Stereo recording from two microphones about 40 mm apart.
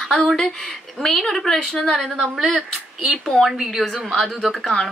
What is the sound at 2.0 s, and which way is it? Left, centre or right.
A woman's voice, centre.